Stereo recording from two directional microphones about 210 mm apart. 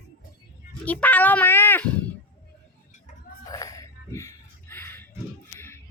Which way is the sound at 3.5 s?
15° left (ahead or behind).